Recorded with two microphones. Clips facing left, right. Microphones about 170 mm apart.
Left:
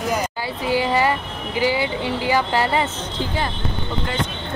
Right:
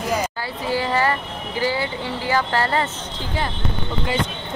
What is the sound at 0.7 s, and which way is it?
Speech, 15° left (ahead or behind).